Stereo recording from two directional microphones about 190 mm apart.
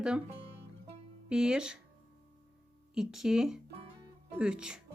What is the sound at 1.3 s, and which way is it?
Speech, 5° right (ahead or behind).